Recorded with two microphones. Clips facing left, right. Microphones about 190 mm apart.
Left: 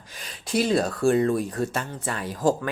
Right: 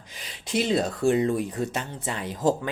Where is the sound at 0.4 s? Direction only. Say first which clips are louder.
Left 2 dB; 20° right (ahead or behind).